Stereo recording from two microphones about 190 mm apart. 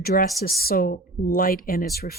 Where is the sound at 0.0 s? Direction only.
55° left (ahead or behind).